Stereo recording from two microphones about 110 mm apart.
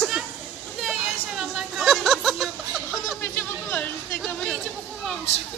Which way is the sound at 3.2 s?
15° left (ahead or behind).